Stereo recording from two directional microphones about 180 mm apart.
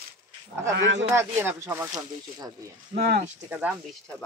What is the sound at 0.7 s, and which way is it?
Speech, 90° right.